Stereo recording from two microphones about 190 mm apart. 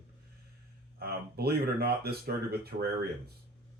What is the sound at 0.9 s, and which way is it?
Speech, 55° right (ahead or behind).